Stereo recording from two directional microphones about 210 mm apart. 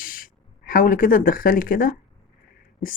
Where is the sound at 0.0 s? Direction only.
40° left (ahead or behind).